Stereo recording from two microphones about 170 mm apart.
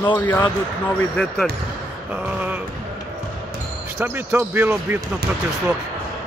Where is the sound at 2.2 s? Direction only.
10° right (ahead or behind).